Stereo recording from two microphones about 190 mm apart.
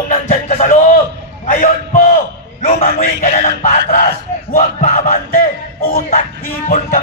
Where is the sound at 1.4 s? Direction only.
45° left (ahead or behind).